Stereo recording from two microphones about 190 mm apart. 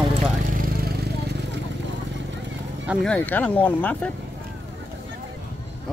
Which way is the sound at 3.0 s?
5° left (ahead or behind).